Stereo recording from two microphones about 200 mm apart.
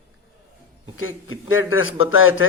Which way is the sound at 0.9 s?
85° left.